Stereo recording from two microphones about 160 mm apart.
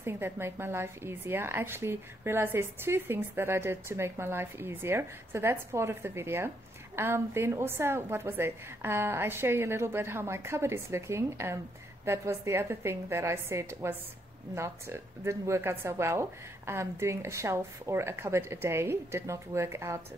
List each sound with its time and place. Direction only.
0.0 s a woman's voice: 15° right (ahead or behind)